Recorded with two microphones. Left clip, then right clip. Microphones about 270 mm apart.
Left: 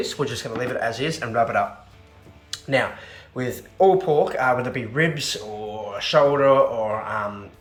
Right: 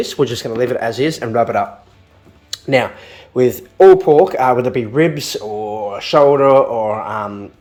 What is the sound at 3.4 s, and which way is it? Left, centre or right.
A man's voice, right.